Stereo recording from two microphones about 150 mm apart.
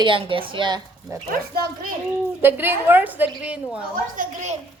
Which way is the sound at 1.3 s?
80° right.